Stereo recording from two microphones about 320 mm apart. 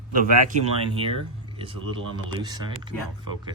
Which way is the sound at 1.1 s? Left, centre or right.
Centre.